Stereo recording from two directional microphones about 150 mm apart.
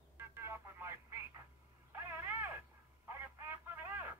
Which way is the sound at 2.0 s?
15° right (ahead or behind).